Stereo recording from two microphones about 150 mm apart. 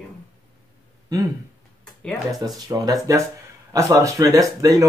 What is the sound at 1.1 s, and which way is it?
Speech, 25° right (ahead or behind).